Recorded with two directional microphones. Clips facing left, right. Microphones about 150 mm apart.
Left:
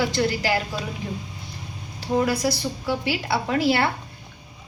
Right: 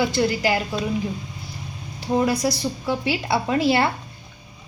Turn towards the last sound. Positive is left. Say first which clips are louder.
# right 2 dB
turn(degrees=-20)  # may be behind; listen again after turning